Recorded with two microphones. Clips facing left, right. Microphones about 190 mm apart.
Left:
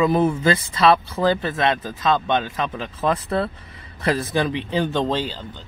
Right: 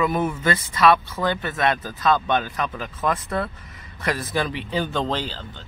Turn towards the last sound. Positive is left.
turn(degrees=20)  # may be behind; listen again after turning